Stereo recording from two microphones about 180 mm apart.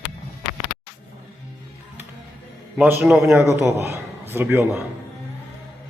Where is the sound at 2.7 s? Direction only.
10° right (ahead or behind).